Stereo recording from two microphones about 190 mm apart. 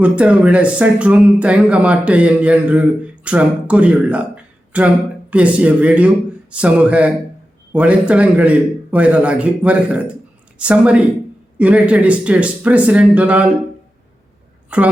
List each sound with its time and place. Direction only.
0.0 s a man's voice: 5° right (ahead or behind)
14.7 s a man's voice: 5° right (ahead or behind)